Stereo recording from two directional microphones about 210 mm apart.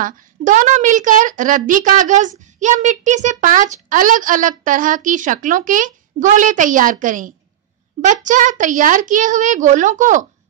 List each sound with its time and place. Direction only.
0.0 s a woman's voice: 40° right (ahead or behind)